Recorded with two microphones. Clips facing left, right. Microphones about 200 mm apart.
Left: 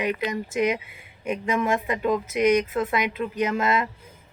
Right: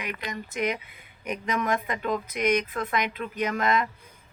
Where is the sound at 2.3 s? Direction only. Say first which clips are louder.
Left 5 dB; 25° left (ahead or behind).